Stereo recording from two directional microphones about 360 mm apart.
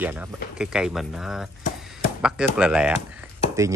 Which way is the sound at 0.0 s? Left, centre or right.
Centre.